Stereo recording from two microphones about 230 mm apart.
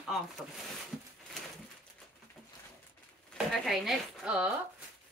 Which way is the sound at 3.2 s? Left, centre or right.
Centre.